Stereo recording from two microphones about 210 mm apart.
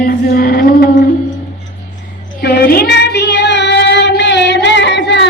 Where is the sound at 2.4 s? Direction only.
50° left (ahead or behind).